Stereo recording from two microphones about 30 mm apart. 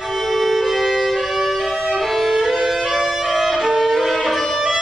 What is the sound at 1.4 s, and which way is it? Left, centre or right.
Violin, centre.